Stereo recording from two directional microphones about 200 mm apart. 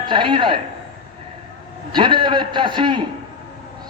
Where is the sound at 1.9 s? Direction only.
25° right (ahead or behind).